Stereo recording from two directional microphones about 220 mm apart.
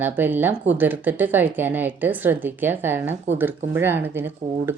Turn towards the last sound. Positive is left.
turn(degrees=-10)  # may be behind; listen again after turning